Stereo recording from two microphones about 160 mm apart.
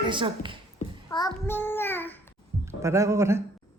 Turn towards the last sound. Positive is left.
turn(degrees=-15)  # may be behind; listen again after turning